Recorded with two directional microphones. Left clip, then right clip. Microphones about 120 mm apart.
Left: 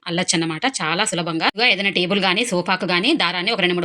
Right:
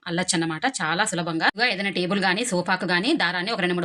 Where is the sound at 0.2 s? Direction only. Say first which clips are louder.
Left 4 dB; 20° left (ahead or behind).